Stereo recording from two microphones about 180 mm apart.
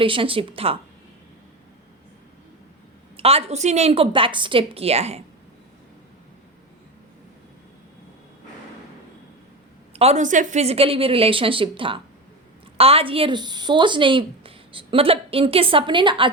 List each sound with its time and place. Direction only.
0.0 s a woman's voice: 30° right (ahead or behind)
3.2 s a woman's voice: 35° right (ahead or behind)
9.9 s a woman's voice: 35° right (ahead or behind)